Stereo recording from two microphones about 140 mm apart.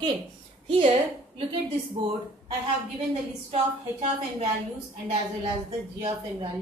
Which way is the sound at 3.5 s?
45° right (ahead or behind).